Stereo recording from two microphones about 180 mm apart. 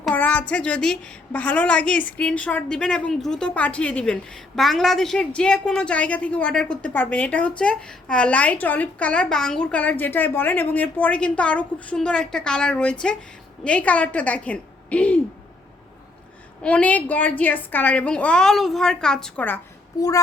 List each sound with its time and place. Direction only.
0.0 s a woman's voice: 10° left (ahead or behind)
16.6 s a woman's voice: 5° left (ahead or behind)
20.0 s a sound: 20° left (ahead or behind)